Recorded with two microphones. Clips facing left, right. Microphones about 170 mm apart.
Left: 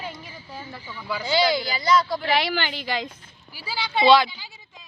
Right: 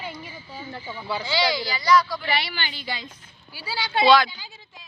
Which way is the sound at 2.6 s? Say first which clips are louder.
Left 5 dB; 90° left.